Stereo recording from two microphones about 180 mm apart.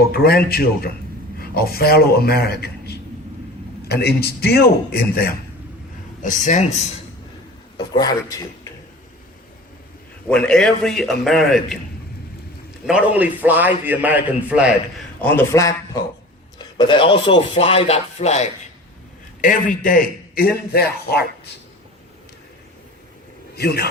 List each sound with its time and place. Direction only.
0.1 s a man's voice: 55° left (ahead or behind)
6.2 s a man's voice: 45° left (ahead or behind)
7.8 s speech: 20° left (ahead or behind)
10.2 s a man's voice: 5° left (ahead or behind)
12.8 s a man's voice: 5° right (ahead or behind)
15.2 s a man's voice: 10° left (ahead or behind); by 18.4 s 35° left (ahead or behind)
19.4 s a man's voice: 50° left (ahead or behind)
23.6 s a man's voice: 60° left (ahead or behind)